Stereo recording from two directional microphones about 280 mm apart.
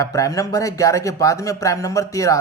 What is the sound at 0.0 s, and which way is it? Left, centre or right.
Speech, centre.